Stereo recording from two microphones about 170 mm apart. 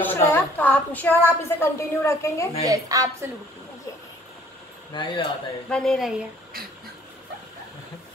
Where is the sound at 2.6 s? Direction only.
20° right (ahead or behind).